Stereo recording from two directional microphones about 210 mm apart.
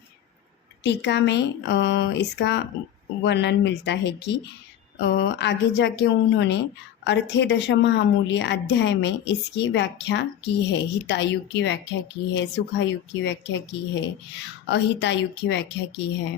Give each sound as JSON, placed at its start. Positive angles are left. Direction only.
{"t": 0.9, "sound": "a woman's voice", "side_deg": 55}